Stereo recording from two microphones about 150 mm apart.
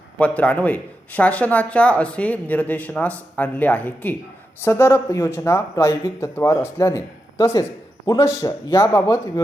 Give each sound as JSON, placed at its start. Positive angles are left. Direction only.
{"t": 0.2, "sound": "speech", "side_deg": 10}